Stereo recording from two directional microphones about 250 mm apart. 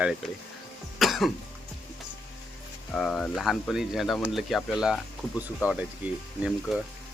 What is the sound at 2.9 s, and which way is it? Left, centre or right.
Speech, centre.